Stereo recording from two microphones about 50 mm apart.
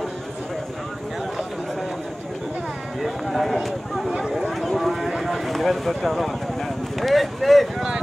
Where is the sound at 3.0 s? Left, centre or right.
Centre.